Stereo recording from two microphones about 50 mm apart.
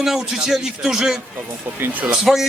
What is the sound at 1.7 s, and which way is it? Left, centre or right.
Speech, right.